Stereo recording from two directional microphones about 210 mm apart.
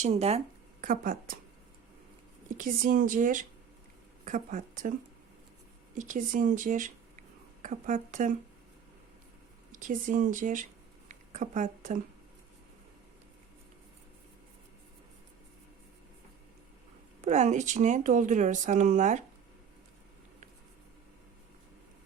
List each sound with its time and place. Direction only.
0.0 s speech: 30° right (ahead or behind)
2.5 s speech: 40° right (ahead or behind)
9.7 s speech: 40° right (ahead or behind)
17.2 s speech: 35° right (ahead or behind)